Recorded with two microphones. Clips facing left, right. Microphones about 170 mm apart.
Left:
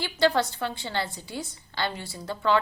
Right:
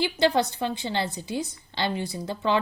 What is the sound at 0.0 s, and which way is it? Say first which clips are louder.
A woman's voice: right 1 dB; 20° right (ahead or behind).